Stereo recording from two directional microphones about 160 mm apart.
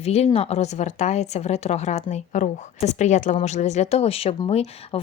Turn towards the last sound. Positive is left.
turn(degrees=40)  # may be behind; listen again after turning